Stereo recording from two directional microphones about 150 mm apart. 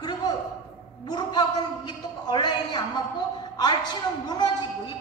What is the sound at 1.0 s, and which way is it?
A woman's voice, 25° left (ahead or behind).